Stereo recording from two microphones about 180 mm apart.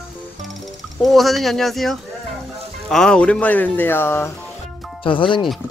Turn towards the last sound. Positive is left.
turn(degrees=30)  # may be behind; listen again after turning